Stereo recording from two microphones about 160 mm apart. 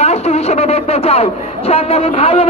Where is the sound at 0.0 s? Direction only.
40° left (ahead or behind).